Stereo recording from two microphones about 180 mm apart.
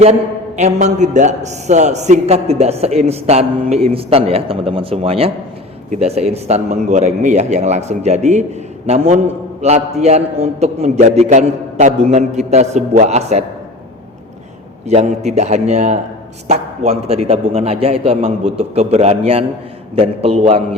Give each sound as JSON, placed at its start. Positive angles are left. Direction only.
{"t": 0.0, "sound": "a man's voice", "side_deg": -40}
{"t": 14.8, "sound": "a man's voice", "side_deg": -40}